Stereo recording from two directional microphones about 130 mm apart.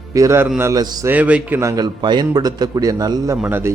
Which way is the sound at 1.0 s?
10° right (ahead or behind).